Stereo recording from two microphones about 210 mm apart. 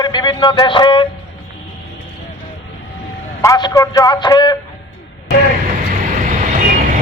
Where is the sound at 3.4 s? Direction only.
15° left (ahead or behind).